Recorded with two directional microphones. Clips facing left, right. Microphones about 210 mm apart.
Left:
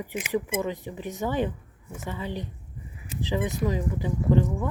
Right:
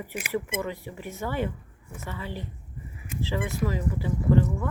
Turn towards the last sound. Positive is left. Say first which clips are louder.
# even
turn(degrees=15)  # may be behind; listen again after turning